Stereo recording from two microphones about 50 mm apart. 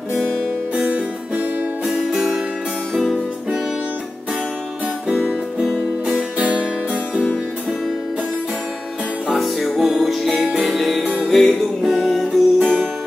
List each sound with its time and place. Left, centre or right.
0.7 s music: right
1.9 s music: centre
6.0 s music: right
9.3 s music: centre